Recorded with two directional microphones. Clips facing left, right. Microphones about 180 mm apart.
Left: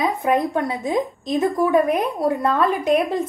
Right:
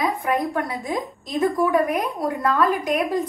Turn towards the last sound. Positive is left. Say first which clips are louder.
# left 3 dB
turn(degrees=25)  # may be behind; listen again after turning